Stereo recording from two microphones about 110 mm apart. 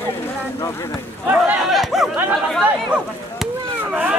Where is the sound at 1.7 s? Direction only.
Centre (ahead or behind).